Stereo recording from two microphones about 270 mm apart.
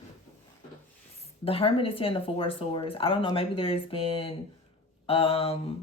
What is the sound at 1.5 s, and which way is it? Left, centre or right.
A woman's voice, left.